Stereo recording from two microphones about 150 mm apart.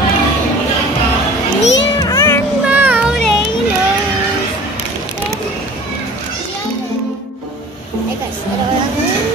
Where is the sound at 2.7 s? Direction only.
10° right (ahead or behind).